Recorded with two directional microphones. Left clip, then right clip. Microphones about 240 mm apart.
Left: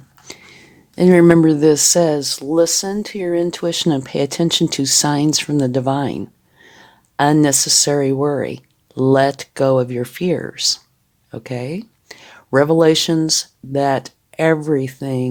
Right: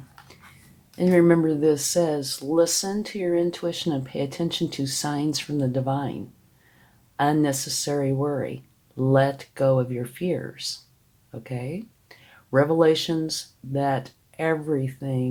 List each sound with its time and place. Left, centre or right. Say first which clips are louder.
0.9 s speech: left 8 dB; left